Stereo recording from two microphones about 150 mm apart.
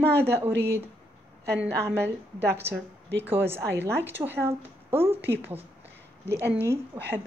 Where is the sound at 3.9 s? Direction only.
15° right (ahead or behind).